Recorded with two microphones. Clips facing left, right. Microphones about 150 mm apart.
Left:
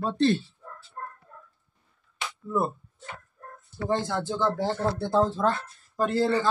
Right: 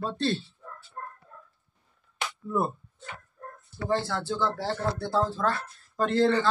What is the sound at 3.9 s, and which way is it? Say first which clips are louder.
Speech: left 1 dB; 20° left (ahead or behind).